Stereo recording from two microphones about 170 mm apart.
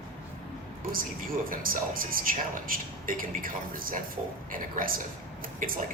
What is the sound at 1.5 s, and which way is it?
A man's voice, 55° right (ahead or behind).